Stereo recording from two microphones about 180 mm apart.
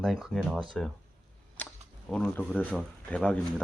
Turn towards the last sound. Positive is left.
turn(degrees=5)  # may be behind; listen again after turning